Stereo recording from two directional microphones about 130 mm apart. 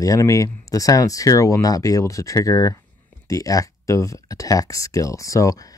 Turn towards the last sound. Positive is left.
turn(degrees=25)  # may be behind; listen again after turning